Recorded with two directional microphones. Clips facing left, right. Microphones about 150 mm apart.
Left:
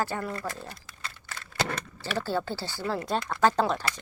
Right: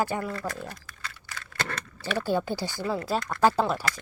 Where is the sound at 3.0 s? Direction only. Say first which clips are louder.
Right 1 dB; 5° right (ahead or behind).